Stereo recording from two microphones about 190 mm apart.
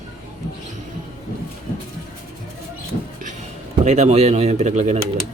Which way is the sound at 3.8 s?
40° right (ahead or behind).